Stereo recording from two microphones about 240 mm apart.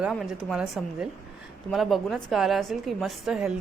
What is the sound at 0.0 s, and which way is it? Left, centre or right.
A woman's voice, centre.